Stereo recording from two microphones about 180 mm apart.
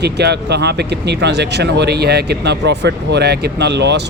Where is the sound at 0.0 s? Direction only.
65° right (ahead or behind).